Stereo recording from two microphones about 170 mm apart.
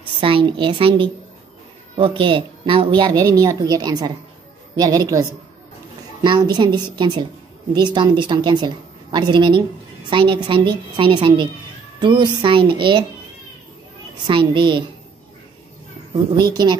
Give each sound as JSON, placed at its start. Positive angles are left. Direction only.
{"t": 0.2, "sound": "a woman's voice", "side_deg": -30}
{"t": 6.2, "sound": "a woman's voice", "side_deg": -25}
{"t": 14.2, "sound": "a woman's voice", "side_deg": -25}
{"t": 16.1, "sound": "a woman's voice", "side_deg": -25}